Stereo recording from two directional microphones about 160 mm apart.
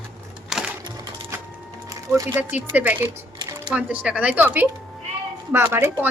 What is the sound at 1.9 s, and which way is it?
A woman's voice, 20° right (ahead or behind).